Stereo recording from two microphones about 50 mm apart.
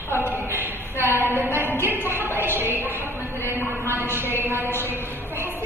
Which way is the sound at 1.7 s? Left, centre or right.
Left.